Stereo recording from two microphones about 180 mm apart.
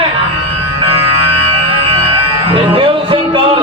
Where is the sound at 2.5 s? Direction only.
30° right (ahead or behind).